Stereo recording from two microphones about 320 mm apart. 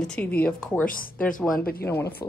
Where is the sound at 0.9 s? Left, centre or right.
Left.